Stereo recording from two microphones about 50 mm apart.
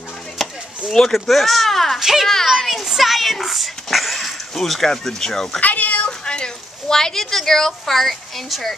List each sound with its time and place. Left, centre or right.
0.4 s chop: centre
0.9 s a child's voice: centre
2.0 s a child's voice: centre
2.2 s a child's voice: centre
5.6 s speech: left
6.0 s speech: centre